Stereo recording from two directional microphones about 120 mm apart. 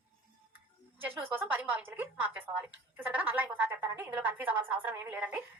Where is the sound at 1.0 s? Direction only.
15° right (ahead or behind).